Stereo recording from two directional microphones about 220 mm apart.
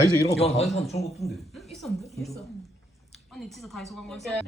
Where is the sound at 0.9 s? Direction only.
30° left (ahead or behind).